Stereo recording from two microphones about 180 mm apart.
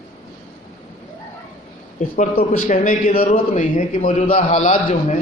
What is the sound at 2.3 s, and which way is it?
A man's voice, 50° left (ahead or behind).